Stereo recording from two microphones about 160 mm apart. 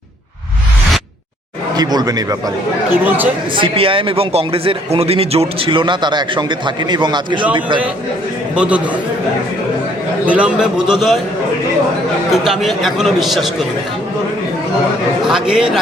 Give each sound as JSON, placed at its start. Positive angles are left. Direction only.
{"t": 1.7, "sound": "speech", "side_deg": -25}
{"t": 2.9, "sound": "speech", "side_deg": -10}
{"t": 3.5, "sound": "a man's voice", "side_deg": -35}
{"t": 8.5, "sound": "speech", "side_deg": -10}
{"t": 10.2, "sound": "a man's voice", "side_deg": -10}
{"t": 12.3, "sound": "a man's voice", "side_deg": 0}
{"t": 15.2, "sound": "a man's voice", "side_deg": -5}